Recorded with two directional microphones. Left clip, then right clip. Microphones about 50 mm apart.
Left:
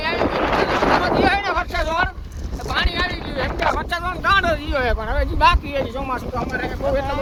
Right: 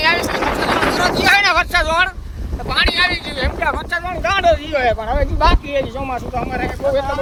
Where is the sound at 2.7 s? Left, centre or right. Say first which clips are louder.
Right 7 dB; right.